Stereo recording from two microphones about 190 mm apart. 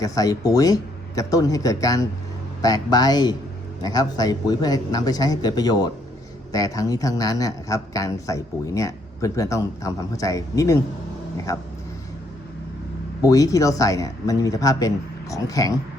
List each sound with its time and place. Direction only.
0.0 s a man's voice: 20° left (ahead or behind)
13.2 s a man's voice: 15° left (ahead or behind)